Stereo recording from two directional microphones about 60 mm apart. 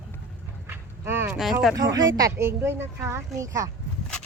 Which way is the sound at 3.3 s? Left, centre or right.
Right.